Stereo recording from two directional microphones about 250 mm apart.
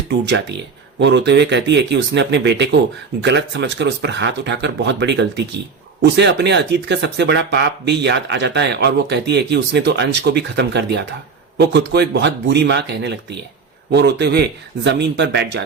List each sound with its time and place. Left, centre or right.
0.1 s speech: right